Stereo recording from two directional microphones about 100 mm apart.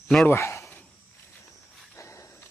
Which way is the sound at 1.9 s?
30° left (ahead or behind).